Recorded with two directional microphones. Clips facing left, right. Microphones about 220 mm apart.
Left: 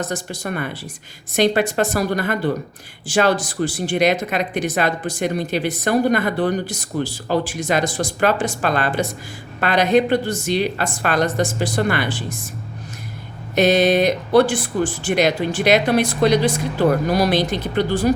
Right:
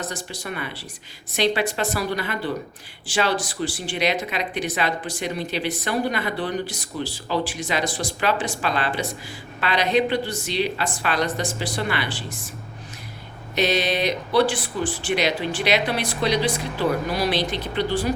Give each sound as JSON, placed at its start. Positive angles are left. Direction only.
{"t": 0.1, "sound": "speech", "side_deg": 50}
{"t": 13.6, "sound": "speech", "side_deg": 50}